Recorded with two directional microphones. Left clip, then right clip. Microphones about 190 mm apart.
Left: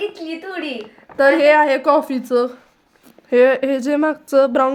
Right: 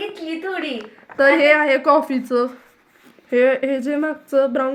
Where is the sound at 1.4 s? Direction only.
25° left (ahead or behind).